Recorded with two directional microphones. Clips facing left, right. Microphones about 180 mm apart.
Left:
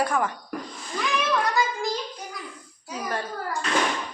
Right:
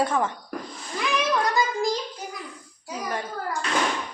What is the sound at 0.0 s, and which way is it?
Speech, 25° right (ahead or behind).